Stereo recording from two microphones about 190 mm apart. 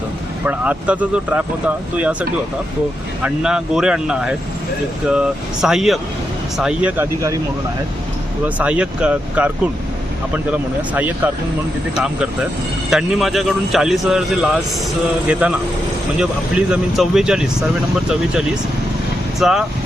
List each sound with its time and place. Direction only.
0.4 s speech: 5° right (ahead or behind)
3.2 s a man's voice: 5° right (ahead or behind)
5.6 s a man's voice: centre (ahead or behind)
8.4 s a man's voice: 5° right (ahead or behind)
19.4 s a man's voice: centre (ahead or behind)